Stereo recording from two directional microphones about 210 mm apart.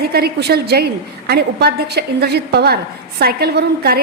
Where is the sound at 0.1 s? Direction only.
50° right (ahead or behind).